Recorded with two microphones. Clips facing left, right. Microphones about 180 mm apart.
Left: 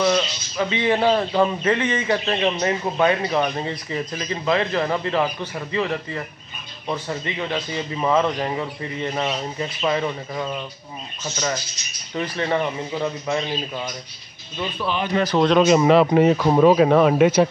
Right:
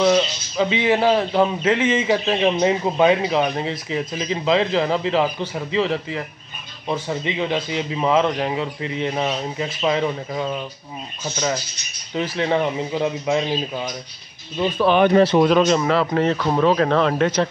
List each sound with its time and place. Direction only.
0.0 s speech: 10° right (ahead or behind)
3.3 s a man's voice: 5° right (ahead or behind)
6.9 s speech: 10° right (ahead or behind)
14.8 s speech: 60° right (ahead or behind)
15.3 s speech: 5° right (ahead or behind)
15.8 s speech: 20° left (ahead or behind)